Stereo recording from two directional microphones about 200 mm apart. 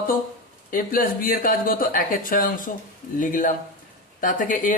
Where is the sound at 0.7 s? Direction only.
45° left (ahead or behind).